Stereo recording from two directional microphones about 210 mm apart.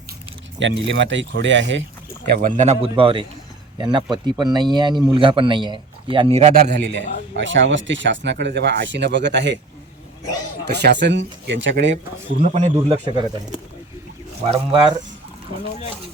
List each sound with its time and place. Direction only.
0.6 s a man's voice: 60° right (ahead or behind)
2.2 s speech: 50° right (ahead or behind)
2.6 s a man's voice: 30° right (ahead or behind)
6.5 s a man's voice: 50° right (ahead or behind)
10.7 s a man's voice: 50° right (ahead or behind)
12.3 s a man's voice: 35° right (ahead or behind)
12.7 s a man's voice: 20° right (ahead or behind)
14.5 s a man's voice: 20° right (ahead or behind)